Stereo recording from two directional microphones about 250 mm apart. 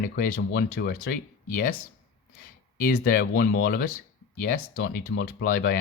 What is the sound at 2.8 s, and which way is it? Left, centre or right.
Speech, left.